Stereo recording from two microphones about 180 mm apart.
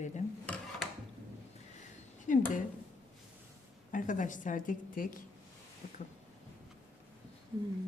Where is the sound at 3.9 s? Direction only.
45° left (ahead or behind).